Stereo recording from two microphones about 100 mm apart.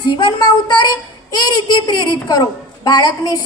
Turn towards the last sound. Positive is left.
turn(degrees=45)  # may be behind; listen again after turning